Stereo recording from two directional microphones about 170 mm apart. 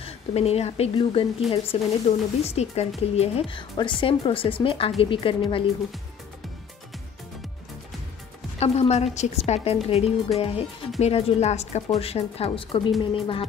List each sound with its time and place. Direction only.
0.0 s a woman's voice: 35° left (ahead or behind)
8.5 s speech: 40° left (ahead or behind)